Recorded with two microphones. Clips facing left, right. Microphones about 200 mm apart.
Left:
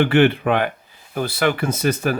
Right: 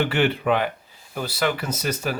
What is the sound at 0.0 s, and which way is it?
Speech, 55° left (ahead or behind).